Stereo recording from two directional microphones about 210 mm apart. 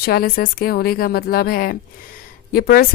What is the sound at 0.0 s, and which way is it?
Speech, 45° left (ahead or behind).